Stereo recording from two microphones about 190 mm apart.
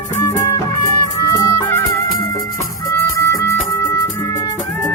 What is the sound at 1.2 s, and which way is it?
Music, 15° left (ahead or behind).